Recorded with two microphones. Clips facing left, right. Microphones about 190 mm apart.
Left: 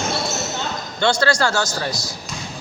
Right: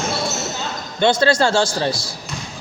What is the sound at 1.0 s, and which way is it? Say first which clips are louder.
A man's voice: right 3 dB; 20° right (ahead or behind).